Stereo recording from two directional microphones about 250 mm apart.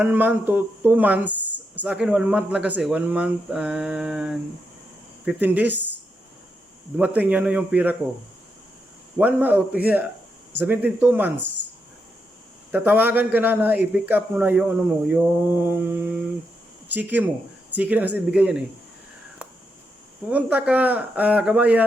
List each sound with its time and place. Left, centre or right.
0.0 s a man's voice: centre
6.9 s a man's voice: centre
9.1 s a man's voice: centre
11.3 s speech: right
12.7 s a man's voice: centre
20.3 s speech: centre